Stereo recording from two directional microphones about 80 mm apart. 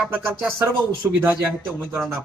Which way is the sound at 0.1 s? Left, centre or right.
Right.